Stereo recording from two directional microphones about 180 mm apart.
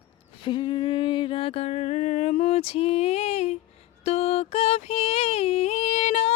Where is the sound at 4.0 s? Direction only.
35° left (ahead or behind).